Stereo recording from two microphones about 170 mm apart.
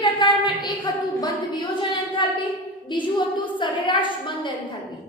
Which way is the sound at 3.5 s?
30° left (ahead or behind).